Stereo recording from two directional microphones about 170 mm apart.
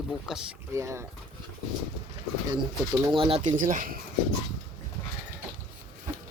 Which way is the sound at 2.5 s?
25° right (ahead or behind).